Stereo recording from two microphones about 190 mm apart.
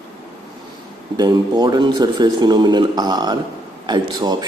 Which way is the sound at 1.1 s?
20° right (ahead or behind).